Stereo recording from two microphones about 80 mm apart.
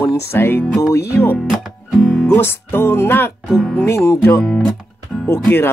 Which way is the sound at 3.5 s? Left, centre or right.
Centre.